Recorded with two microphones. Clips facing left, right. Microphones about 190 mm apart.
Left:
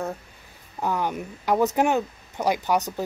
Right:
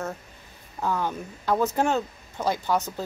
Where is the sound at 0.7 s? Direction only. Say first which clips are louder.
Left 1 dB; 15° left (ahead or behind).